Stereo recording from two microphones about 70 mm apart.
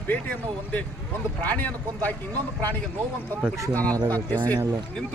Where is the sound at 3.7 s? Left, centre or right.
Left.